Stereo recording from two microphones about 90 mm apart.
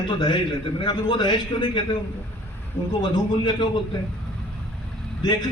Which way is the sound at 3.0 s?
60° left (ahead or behind).